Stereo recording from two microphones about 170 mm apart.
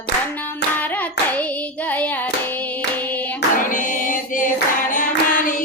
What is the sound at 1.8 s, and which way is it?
Hands, 10° left (ahead or behind).